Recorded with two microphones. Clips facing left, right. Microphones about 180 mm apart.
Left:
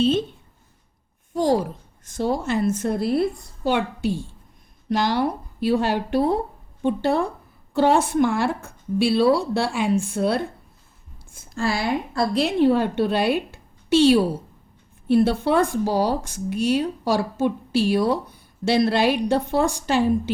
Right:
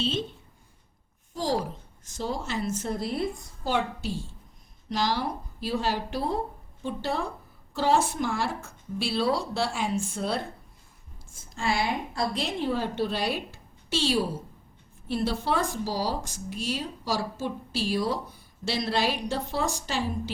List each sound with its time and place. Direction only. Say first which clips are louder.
2.0 s speech: left 8 dB; 55° left (ahead or behind)
12.1 s speech: left 8 dB; 65° left (ahead or behind)